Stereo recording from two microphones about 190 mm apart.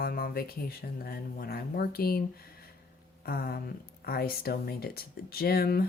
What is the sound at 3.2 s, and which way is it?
Speech, 50° left (ahead or behind).